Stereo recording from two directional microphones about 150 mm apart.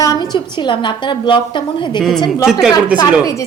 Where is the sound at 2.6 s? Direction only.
5° right (ahead or behind).